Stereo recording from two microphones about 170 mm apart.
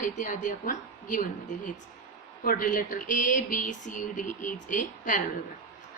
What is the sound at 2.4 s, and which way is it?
Speech, 55° left (ahead or behind).